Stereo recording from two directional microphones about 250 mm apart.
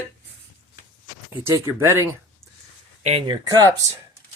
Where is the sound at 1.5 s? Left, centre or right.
Centre.